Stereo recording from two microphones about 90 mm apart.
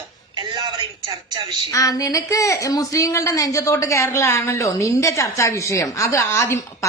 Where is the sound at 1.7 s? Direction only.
40° left (ahead or behind).